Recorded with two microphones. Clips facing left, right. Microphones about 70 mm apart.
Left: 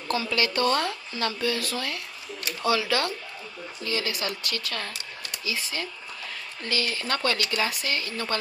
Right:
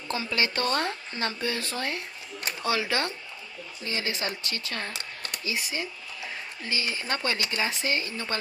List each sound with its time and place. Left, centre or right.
0.1 s speech: right
5.2 s a sound: right
5.5 s speech: centre